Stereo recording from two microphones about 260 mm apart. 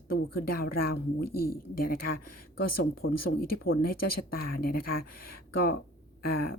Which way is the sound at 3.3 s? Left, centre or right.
Left.